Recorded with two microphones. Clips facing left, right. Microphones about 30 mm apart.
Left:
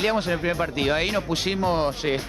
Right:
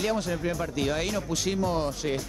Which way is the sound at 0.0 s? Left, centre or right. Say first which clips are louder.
Left 5 dB; left.